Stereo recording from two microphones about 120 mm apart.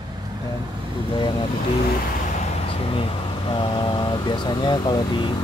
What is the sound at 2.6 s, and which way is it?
Speech, 50° left (ahead or behind).